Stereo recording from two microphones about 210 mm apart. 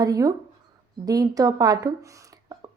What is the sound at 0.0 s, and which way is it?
A woman's voice, 15° right (ahead or behind).